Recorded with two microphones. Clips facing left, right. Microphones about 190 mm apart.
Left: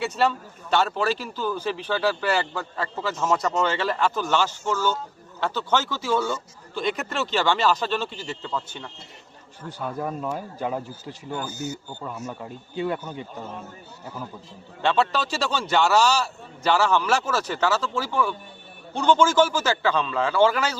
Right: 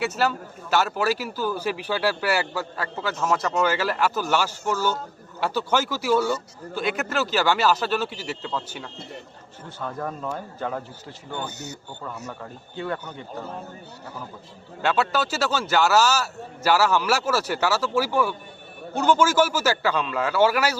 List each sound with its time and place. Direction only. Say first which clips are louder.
0.0 s speech: left 1 dB; 5° right (ahead or behind)
9.6 s a man's voice: left 2 dB; 10° left (ahead or behind)
11.4 s speech: left 4 dB; 70° right (ahead or behind)
12.3 s a man's voice: left 2 dB; 15° left (ahead or behind)
14.8 s speech: even; 5° right (ahead or behind)